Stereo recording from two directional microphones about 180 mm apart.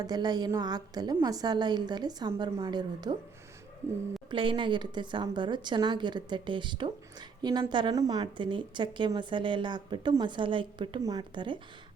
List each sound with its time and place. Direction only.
0.0 s a woman's voice: 20° right (ahead or behind)
4.3 s a woman's voice: 25° right (ahead or behind)